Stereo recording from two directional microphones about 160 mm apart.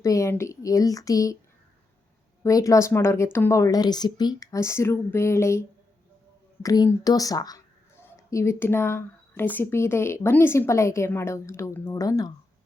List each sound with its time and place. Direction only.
0.0 s a woman's voice: 20° left (ahead or behind)
2.4 s a woman's voice: 20° left (ahead or behind)